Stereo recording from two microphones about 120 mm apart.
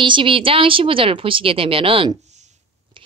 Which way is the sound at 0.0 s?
45° right (ahead or behind).